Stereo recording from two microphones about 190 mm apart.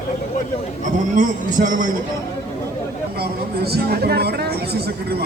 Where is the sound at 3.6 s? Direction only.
55° right (ahead or behind).